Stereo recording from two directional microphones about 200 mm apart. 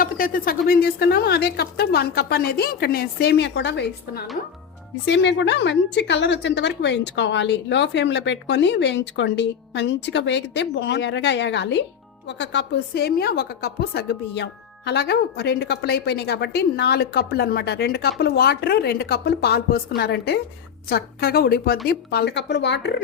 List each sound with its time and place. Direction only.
0.0 s a woman's voice: 45° left (ahead or behind)